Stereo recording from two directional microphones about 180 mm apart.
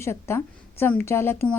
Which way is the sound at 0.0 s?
15° left (ahead or behind).